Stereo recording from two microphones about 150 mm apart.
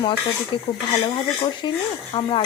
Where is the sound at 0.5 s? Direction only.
35° left (ahead or behind).